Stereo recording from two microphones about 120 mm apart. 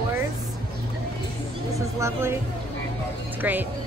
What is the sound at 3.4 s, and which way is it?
Speech, 15° right (ahead or behind).